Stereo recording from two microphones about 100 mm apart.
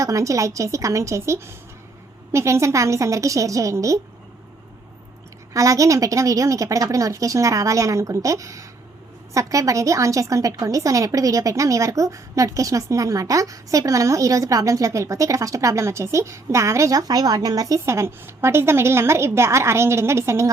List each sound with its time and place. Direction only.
0.0 s a woman's voice: 35° right (ahead or behind)
5.5 s a woman's voice: 35° right (ahead or behind)